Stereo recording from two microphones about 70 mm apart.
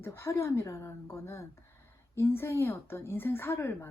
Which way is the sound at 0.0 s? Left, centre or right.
Left.